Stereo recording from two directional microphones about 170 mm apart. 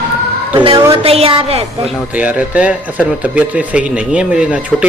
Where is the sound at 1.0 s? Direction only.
35° right (ahead or behind).